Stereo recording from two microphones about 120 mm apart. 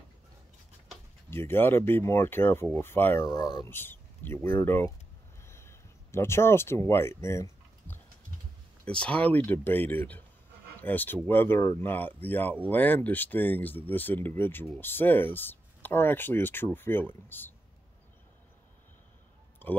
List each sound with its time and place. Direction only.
1.3 s speech: 20° left (ahead or behind)
5.4 s a sound: 20° left (ahead or behind)
8.8 s speech: 10° left (ahead or behind)